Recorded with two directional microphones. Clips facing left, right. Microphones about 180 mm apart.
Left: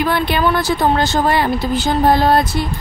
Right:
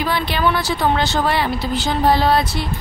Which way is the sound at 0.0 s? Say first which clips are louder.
Left 3 dB; 50° left (ahead or behind).